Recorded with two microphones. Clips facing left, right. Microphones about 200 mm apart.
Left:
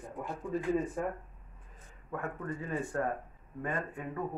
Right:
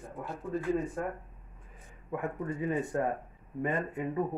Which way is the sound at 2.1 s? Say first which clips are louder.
Right 3 dB; 15° right (ahead or behind).